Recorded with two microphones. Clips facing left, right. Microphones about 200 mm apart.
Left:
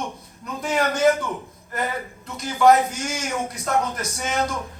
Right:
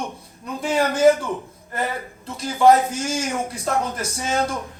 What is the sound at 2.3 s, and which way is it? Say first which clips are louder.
A man's voice: right 1 dB; 30° right (ahead or behind).